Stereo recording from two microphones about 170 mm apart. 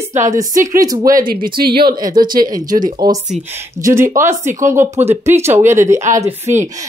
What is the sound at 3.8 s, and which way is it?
Speech, 15° right (ahead or behind).